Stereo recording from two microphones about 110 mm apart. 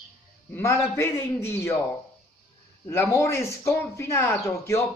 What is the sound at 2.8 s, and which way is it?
Speech, 25° left (ahead or behind).